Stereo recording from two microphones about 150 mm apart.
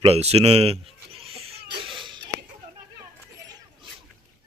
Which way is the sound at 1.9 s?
35° right (ahead or behind).